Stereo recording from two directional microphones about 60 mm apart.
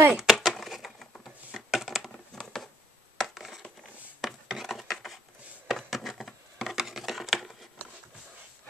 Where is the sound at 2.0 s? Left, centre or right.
Centre.